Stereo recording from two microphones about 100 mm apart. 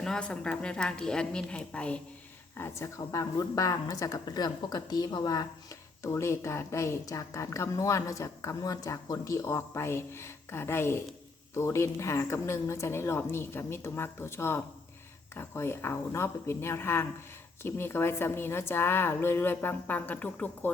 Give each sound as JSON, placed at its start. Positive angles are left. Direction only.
{"t": 0.0, "sound": "a woman's voice", "side_deg": 10}
{"t": 2.6, "sound": "speech", "side_deg": 25}
{"t": 6.0, "sound": "speech", "side_deg": 30}